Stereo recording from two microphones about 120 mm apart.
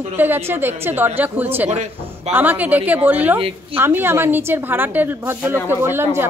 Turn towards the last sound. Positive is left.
turn(degrees=-20)  # may be behind; listen again after turning